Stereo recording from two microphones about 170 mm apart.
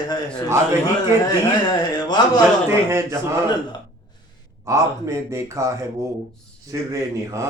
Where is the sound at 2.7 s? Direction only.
15° right (ahead or behind).